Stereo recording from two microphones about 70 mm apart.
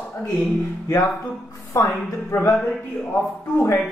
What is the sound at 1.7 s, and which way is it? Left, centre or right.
Speech, left.